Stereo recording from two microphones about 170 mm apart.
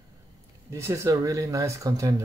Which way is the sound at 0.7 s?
15° right (ahead or behind).